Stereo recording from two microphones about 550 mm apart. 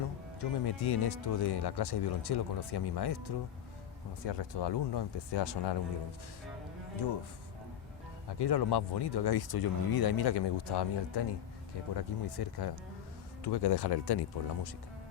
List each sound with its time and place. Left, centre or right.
0.3 s speech: left
7.0 s speech: left
8.3 s speech: left